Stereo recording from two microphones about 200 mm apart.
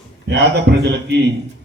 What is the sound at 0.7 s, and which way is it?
Speech, 55° right (ahead or behind).